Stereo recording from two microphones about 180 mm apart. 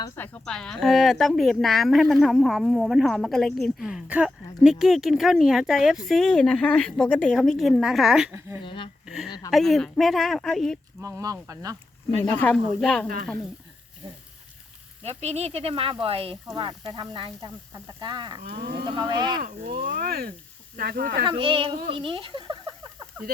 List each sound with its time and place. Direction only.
0.2 s speech: 5° left (ahead or behind)
8.6 s speech: 25° left (ahead or behind)
9.0 s a woman's voice: centre (ahead or behind)
11.0 s speech: 20° right (ahead or behind)
12.2 s speech: 15° left (ahead or behind)
15.0 s speech: 35° right (ahead or behind)
18.4 s speech: 65° right (ahead or behind)
18.7 s speech: 20° right (ahead or behind)
19.7 s speech: 55° right (ahead or behind)
21.2 s speech: 30° right (ahead or behind)
21.8 s a sound: 30° right (ahead or behind)